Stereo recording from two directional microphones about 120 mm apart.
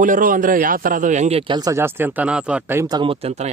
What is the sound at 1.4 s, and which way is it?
Speech, 40° right (ahead or behind).